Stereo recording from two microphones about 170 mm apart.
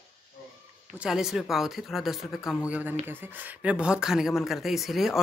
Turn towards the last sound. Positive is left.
turn(degrees=0)  # may be behind; listen again after turning